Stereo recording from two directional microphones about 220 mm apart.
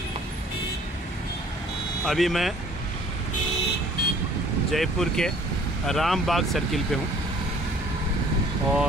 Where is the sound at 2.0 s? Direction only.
Centre (ahead or behind).